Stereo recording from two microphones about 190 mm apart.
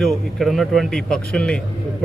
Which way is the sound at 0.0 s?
Centre (ahead or behind).